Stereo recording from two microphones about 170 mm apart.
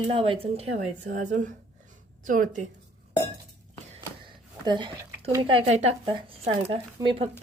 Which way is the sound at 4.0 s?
30° right (ahead or behind).